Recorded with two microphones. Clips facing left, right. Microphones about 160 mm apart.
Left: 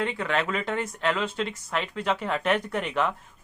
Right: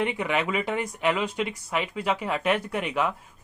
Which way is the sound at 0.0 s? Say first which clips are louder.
Right 1 dB; 15° right (ahead or behind).